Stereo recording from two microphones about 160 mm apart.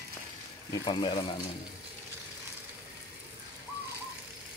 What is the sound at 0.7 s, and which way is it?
Speech, 30° left (ahead or behind).